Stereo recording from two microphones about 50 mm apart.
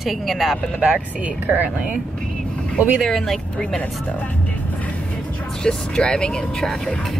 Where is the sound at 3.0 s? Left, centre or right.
Centre.